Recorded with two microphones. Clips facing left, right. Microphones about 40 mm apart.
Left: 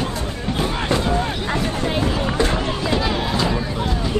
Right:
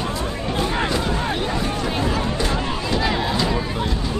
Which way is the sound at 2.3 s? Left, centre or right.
Left.